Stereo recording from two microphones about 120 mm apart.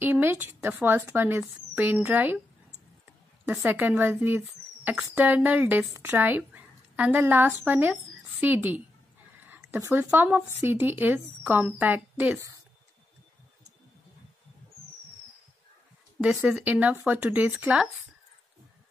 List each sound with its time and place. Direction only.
0.0 s a sound: 15° right (ahead or behind)
0.8 s speech: 20° right (ahead or behind)
3.4 s a woman's voice: 15° right (ahead or behind)
16.4 s speech: 10° right (ahead or behind)